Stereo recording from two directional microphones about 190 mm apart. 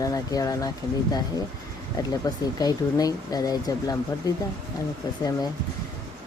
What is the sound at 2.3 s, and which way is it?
Speech, 20° left (ahead or behind).